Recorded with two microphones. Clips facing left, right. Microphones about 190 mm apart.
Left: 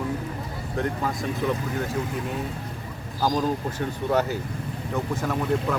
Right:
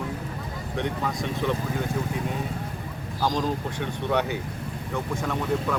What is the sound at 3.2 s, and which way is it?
Speech, 5° left (ahead or behind).